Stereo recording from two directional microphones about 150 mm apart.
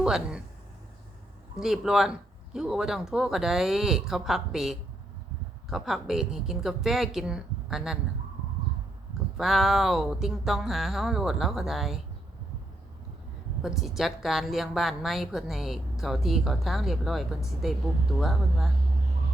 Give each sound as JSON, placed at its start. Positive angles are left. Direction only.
{"t": 0.0, "sound": "a woman's voice", "side_deg": -5}
{"t": 1.5, "sound": "a woman's voice", "side_deg": 0}
{"t": 9.4, "sound": "a woman's voice", "side_deg": 0}
{"t": 13.6, "sound": "a woman's voice", "side_deg": -5}